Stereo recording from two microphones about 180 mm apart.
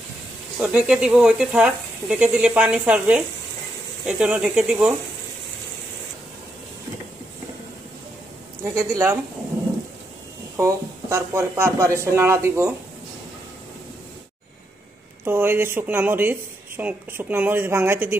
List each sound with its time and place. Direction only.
0.6 s speech: 5° right (ahead or behind)
8.7 s speech: 15° right (ahead or behind)
10.5 s speech: 15° right (ahead or behind)
15.2 s speech: 10° right (ahead or behind)